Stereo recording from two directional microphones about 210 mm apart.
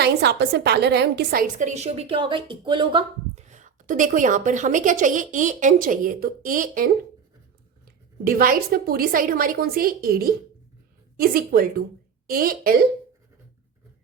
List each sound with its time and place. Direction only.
0.0 s a woman's voice: 50° right (ahead or behind)
8.2 s a woman's voice: 45° right (ahead or behind)